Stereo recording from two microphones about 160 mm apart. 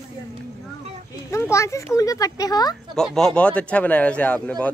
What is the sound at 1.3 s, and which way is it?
Speech, 20° left (ahead or behind).